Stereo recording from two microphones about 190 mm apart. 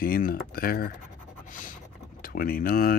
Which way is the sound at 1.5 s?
45° left (ahead or behind).